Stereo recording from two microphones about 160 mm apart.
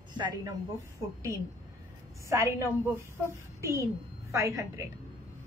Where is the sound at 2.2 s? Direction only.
15° right (ahead or behind).